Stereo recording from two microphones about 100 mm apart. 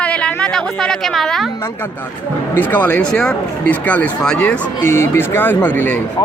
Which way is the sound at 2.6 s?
20° left (ahead or behind).